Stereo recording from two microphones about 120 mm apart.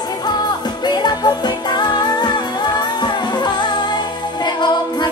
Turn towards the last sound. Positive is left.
turn(degrees=40)  # may be behind; listen again after turning